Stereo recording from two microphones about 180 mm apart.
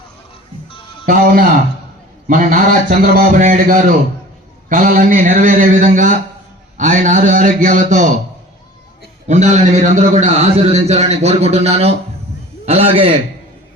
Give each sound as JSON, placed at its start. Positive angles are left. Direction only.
{"t": 1.0, "sound": "speech", "side_deg": -50}
{"t": 9.2, "sound": "a man's voice", "side_deg": -40}